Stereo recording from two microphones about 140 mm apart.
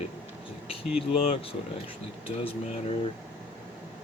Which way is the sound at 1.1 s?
45° left (ahead or behind).